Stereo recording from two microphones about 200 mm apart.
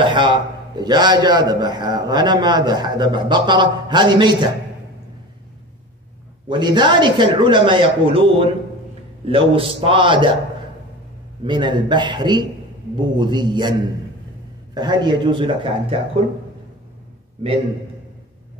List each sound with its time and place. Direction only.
0.0 s a man's voice: 25° right (ahead or behind)
6.5 s a man's voice: 20° right (ahead or behind)
11.4 s a man's voice: 20° right (ahead or behind)